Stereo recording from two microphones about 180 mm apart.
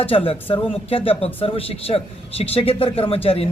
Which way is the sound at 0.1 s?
30° left (ahead or behind).